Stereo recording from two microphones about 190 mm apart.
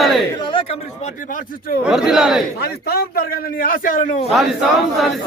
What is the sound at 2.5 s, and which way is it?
A man's voice, 55° left (ahead or behind).